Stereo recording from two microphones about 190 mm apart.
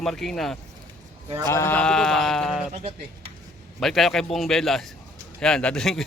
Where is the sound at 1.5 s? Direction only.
15° left (ahead or behind).